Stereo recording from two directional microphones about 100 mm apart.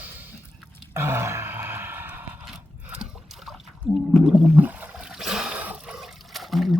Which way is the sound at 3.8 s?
5° right (ahead or behind).